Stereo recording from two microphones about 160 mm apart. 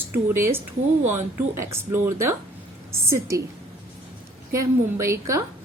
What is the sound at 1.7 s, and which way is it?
A woman's voice, 15° right (ahead or behind).